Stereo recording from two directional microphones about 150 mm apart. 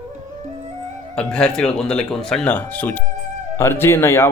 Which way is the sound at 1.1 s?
5° left (ahead or behind).